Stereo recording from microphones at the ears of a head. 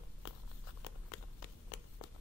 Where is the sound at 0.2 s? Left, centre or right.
Left.